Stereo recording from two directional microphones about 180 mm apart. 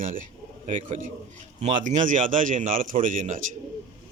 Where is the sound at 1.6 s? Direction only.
40° right (ahead or behind).